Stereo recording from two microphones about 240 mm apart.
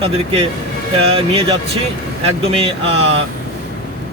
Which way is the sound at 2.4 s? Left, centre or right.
Right.